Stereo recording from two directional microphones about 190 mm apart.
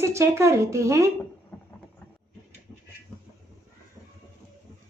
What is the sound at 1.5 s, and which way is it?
Vehicle, 10° left (ahead or behind).